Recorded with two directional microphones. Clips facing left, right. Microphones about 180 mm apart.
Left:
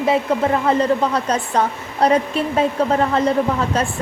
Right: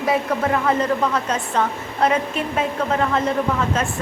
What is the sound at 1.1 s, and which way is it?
A woman's voice, 35° left (ahead or behind).